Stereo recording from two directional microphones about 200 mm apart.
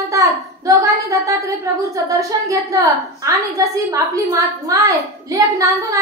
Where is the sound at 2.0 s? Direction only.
15° right (ahead or behind).